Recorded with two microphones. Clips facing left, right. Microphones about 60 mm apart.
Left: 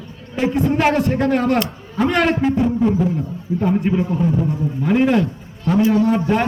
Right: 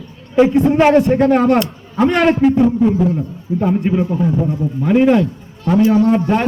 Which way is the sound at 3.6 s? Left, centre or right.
Centre.